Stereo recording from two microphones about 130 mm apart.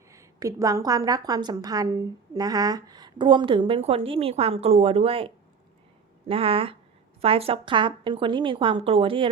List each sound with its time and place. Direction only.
0.1 s a woman's voice: 25° right (ahead or behind); by 9.3 s 40° right (ahead or behind)